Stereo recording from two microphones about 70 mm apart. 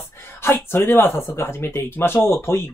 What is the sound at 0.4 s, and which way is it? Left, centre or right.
Speech, left.